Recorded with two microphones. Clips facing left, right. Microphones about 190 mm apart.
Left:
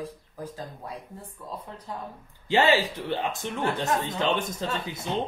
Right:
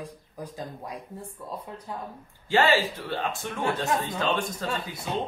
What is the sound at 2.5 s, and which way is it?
Speech, 20° left (ahead or behind).